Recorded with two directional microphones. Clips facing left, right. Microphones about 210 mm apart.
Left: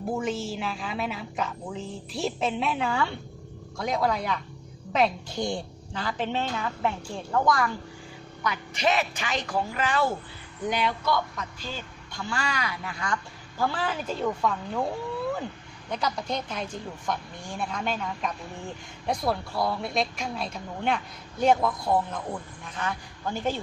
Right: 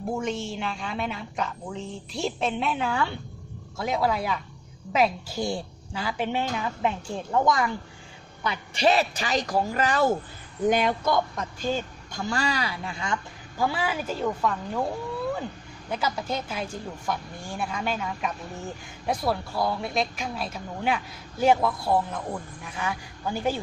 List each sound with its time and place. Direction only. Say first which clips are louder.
0.1 s a woman's voice: even; centre (ahead or behind); by 7.7 s 20° right (ahead or behind)
8.5 s a woman's voice: right 3 dB; 30° right (ahead or behind)
13.6 s speech: right 1 dB; 10° right (ahead or behind)
15.9 s a woman's voice: right 1 dB; 5° right (ahead or behind)